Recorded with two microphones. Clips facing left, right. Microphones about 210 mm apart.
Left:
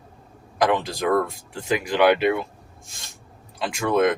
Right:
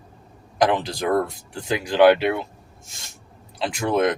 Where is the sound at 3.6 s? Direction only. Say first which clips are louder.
Left 1 dB; 20° right (ahead or behind).